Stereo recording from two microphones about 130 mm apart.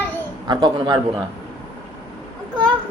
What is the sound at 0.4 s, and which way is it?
Speech, 35° right (ahead or behind).